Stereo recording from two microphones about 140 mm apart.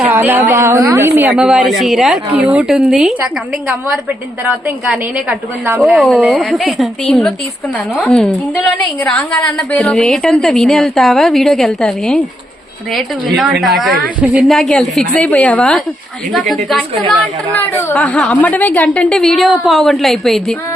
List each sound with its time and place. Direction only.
0.1 s a woman's voice: 15° right (ahead or behind)
1.3 s a woman's voice: 5° right (ahead or behind)
4.4 s a woman's voice: 10° right (ahead or behind)
5.8 s a woman's voice: centre (ahead or behind)
17.5 s a woman's voice: 15° left (ahead or behind)